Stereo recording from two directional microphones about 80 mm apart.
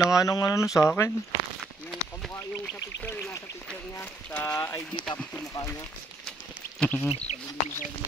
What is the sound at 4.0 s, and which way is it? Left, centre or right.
Speech, left.